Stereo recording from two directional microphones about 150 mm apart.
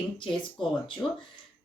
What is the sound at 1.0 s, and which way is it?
Speech, 20° left (ahead or behind).